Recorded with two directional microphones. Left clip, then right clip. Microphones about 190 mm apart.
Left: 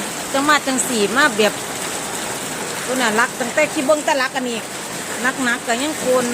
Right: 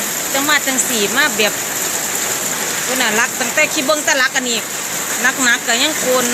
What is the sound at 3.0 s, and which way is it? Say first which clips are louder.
Speech: right 1 dB; 20° left (ahead or behind).